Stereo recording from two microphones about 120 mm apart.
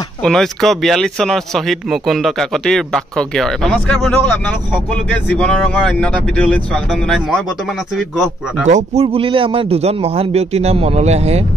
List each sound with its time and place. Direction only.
0.2 s speech: 5° left (ahead or behind)
5.3 s speech: 10° left (ahead or behind)
8.6 s a man's voice: 65° right (ahead or behind)